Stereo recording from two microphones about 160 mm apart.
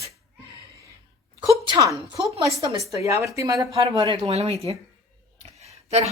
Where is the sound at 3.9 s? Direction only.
35° right (ahead or behind).